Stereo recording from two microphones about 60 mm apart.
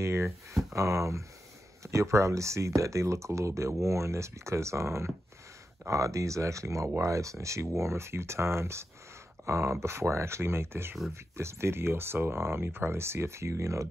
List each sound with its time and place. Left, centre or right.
0.0 s speech: right
5.9 s speech: right